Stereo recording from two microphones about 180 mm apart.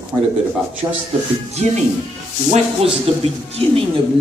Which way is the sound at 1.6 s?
40° right (ahead or behind).